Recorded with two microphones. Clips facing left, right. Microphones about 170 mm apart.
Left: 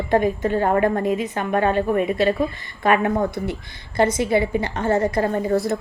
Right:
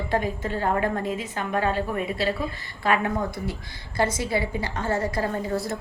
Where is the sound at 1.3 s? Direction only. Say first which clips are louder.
Left 3 dB; 50° left (ahead or behind).